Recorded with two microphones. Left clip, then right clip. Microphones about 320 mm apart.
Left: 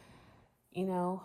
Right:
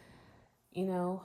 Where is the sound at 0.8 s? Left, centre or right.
Centre.